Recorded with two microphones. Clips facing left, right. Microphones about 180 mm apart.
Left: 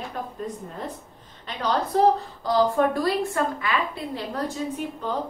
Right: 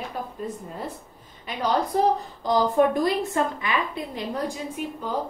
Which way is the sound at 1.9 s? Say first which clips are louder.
Left 2 dB; 15° right (ahead or behind).